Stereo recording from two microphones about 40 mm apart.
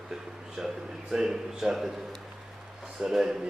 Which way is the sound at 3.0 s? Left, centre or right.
Centre.